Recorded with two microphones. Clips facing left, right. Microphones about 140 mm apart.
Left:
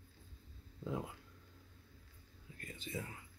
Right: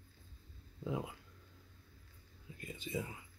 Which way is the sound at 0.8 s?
5° right (ahead or behind).